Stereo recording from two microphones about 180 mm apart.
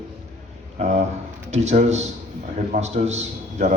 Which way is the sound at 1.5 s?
40° right (ahead or behind).